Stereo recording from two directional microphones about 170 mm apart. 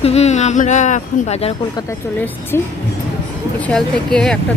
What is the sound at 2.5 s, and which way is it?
Speech, 15° left (ahead or behind).